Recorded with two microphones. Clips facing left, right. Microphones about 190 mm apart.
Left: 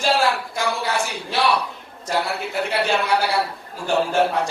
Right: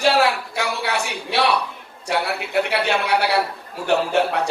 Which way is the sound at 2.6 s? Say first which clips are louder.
Even; 65° right (ahead or behind).